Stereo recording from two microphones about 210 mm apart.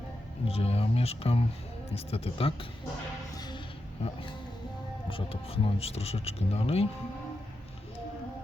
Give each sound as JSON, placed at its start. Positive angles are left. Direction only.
{"t": 0.4, "sound": "speech", "side_deg": 30}
{"t": 3.3, "sound": "music", "side_deg": 20}
{"t": 5.0, "sound": "speech", "side_deg": 25}